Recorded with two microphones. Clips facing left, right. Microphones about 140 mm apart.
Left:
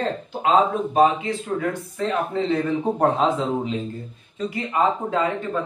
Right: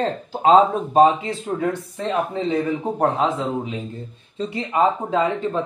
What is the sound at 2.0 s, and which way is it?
Speech, 20° right (ahead or behind).